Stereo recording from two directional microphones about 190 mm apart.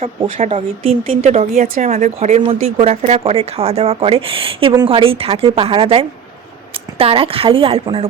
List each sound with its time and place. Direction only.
0.3 s a woman's voice: 35° right (ahead or behind)